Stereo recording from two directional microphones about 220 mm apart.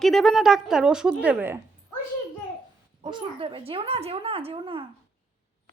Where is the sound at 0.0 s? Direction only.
Centre (ahead or behind).